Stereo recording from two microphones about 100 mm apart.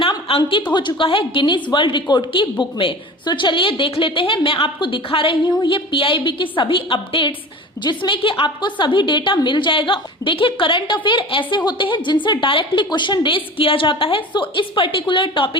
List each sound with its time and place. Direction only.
0.3 s a woman's voice: 65° left (ahead or behind)
0.7 s a woman's voice: 50° left (ahead or behind)